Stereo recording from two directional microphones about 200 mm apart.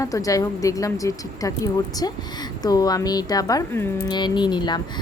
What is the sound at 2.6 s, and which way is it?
Speech, 20° left (ahead or behind).